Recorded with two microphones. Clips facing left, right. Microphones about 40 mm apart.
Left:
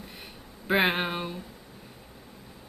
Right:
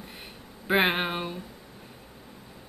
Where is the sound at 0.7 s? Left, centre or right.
Centre.